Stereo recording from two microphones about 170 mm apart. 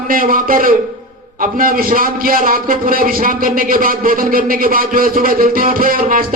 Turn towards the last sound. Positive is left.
turn(degrees=-55)  # may be behind; listen again after turning